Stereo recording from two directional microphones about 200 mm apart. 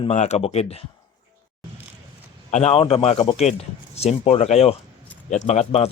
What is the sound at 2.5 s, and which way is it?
Speech, 35° left (ahead or behind).